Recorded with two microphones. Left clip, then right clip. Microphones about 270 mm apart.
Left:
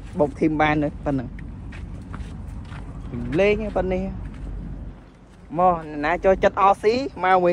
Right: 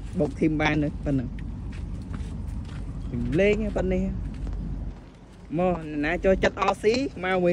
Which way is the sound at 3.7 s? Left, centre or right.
Centre.